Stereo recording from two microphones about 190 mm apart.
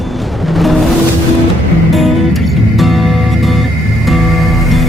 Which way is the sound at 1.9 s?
Centre (ahead or behind).